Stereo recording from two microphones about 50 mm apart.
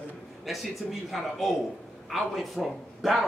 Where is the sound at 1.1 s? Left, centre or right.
Centre.